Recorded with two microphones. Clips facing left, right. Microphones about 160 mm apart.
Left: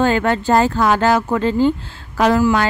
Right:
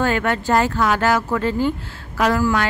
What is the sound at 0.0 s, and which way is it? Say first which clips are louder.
Speech: left 4 dB; 30° left (ahead or behind).